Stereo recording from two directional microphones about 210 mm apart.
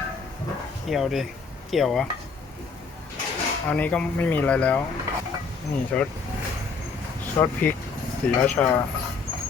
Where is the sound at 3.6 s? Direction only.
5° left (ahead or behind).